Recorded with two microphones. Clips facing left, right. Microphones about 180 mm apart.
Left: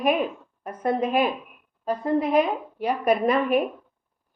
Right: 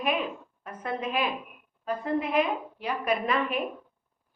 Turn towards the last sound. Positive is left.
turn(degrees=45)  # may be behind; listen again after turning